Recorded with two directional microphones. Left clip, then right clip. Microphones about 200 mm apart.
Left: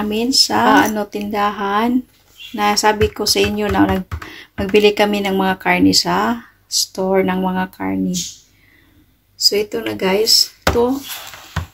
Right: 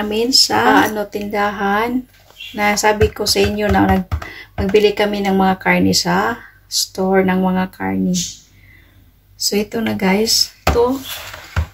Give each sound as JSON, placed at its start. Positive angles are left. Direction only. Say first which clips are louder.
{"t": 0.0, "sound": "speech", "louder": "right 2 dB", "side_deg": 15}
{"t": 9.5, "sound": "speech", "louder": "even", "side_deg": 20}